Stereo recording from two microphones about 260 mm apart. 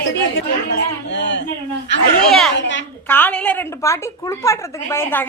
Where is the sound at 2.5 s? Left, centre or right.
Left.